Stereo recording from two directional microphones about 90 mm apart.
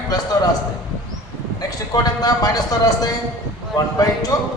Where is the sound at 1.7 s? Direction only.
45° left (ahead or behind).